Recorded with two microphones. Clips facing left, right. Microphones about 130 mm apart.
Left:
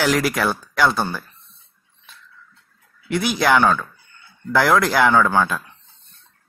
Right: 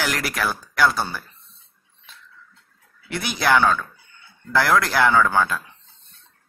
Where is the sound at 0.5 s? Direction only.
20° left (ahead or behind).